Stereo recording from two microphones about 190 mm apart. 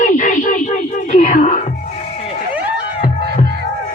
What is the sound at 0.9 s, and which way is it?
Music, 40° left (ahead or behind).